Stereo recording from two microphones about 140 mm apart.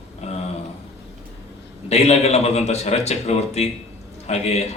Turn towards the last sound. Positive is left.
turn(degrees=50)  # may be behind; listen again after turning